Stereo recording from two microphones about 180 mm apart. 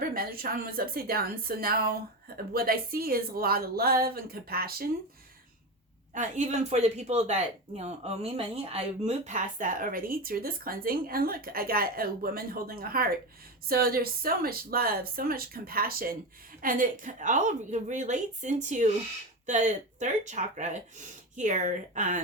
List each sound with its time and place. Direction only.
0.0 s speech: 55° right (ahead or behind)
6.1 s speech: 40° right (ahead or behind)